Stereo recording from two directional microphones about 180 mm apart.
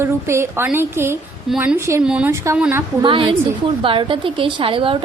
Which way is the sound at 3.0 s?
30° right (ahead or behind).